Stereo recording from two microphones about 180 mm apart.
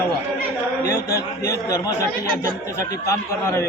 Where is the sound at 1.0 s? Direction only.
60° left (ahead or behind).